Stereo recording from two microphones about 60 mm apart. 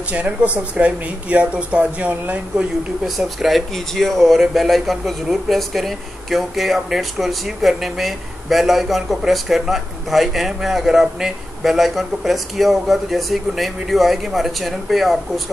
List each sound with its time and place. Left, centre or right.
0.1 s speech: right
3.2 s speech: centre